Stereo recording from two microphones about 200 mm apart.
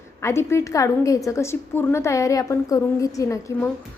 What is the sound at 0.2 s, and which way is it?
A woman's voice, 15° left (ahead or behind).